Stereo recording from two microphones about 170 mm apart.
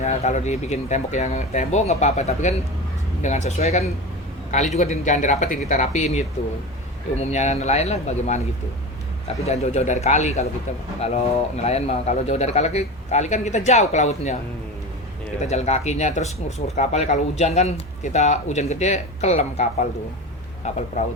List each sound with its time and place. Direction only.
0.0 s speech: 45° left (ahead or behind)
15.4 s speech: 40° left (ahead or behind)